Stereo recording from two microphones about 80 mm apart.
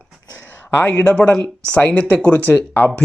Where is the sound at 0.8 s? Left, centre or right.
Centre.